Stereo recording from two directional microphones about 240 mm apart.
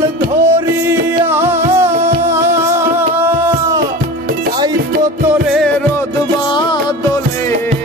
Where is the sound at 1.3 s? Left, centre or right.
Centre.